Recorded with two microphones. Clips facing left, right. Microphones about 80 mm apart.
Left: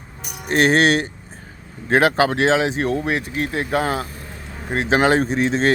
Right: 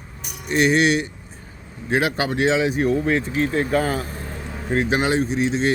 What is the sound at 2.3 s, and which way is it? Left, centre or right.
Speech, left.